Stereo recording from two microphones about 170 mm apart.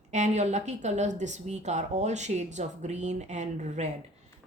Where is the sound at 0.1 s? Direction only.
40° right (ahead or behind).